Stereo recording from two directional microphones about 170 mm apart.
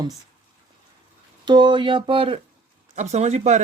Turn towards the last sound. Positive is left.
turn(degrees=-40)  # may be behind; listen again after turning